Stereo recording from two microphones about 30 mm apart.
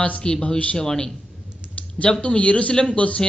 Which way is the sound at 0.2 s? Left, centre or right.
Left.